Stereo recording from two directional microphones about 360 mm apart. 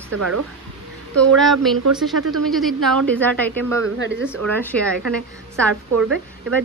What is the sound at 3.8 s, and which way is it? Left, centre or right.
Speech, right.